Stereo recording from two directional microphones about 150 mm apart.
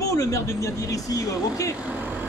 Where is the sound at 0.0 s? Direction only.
20° left (ahead or behind).